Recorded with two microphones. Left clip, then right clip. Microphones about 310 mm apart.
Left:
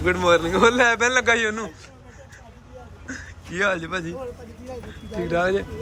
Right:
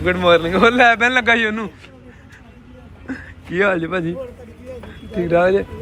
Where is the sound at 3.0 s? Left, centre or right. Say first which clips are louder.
Right 6 dB; centre.